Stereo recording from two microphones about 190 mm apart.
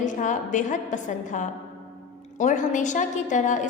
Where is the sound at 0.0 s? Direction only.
40° left (ahead or behind).